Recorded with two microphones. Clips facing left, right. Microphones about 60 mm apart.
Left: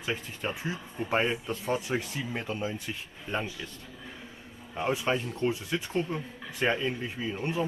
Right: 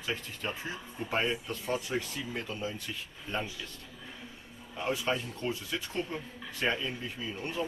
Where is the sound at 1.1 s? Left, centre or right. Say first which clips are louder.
Left 3 dB; left.